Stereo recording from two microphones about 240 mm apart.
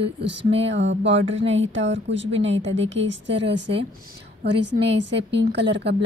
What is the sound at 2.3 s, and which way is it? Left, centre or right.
Speech, right.